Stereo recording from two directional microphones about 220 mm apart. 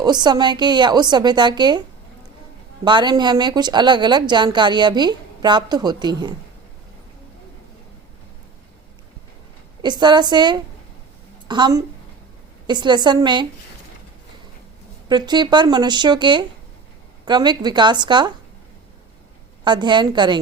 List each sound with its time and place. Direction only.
0.0 s a woman's voice: 20° right (ahead or behind)
2.8 s a woman's voice: 20° right (ahead or behind)
9.8 s a woman's voice: 20° right (ahead or behind)
15.1 s a woman's voice: 20° right (ahead or behind)
19.6 s a woman's voice: 20° right (ahead or behind)